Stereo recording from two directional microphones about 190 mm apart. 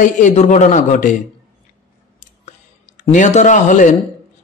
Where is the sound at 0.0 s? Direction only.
40° left (ahead or behind).